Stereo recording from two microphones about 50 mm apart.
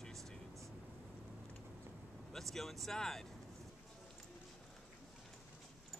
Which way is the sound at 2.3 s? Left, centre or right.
Centre.